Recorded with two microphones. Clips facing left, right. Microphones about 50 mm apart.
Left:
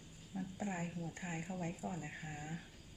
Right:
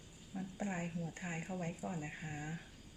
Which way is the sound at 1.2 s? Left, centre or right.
Right.